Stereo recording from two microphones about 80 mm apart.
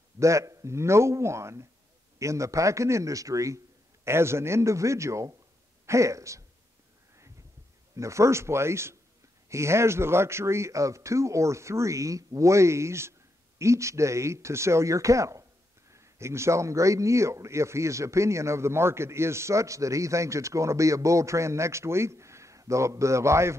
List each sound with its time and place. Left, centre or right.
0.2 s a man's voice: right
7.9 s a man's voice: right